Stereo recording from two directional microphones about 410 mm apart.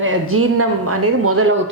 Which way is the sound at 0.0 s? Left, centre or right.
Right.